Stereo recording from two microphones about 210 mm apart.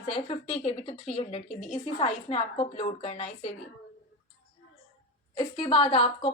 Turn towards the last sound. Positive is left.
turn(degrees=25)  # may be behind; listen again after turning